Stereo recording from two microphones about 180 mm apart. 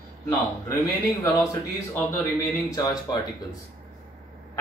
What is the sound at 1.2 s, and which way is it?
A man's voice, 15° left (ahead or behind).